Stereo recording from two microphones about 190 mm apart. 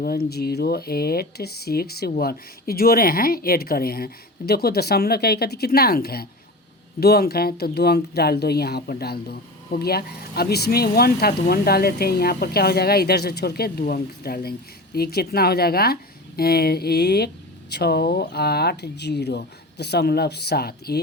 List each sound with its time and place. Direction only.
0.0 s speech: 55° left (ahead or behind)